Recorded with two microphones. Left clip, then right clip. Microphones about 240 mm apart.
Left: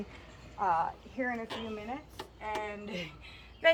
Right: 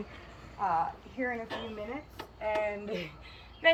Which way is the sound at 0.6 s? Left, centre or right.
Left.